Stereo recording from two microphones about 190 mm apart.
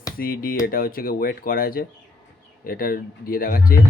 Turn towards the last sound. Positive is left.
turn(degrees=50)  # may be behind; listen again after turning